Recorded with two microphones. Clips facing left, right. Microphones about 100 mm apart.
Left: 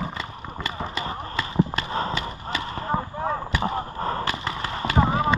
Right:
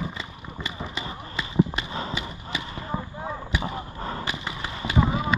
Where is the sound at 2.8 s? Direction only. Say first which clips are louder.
Left 6 dB; 50° left (ahead or behind).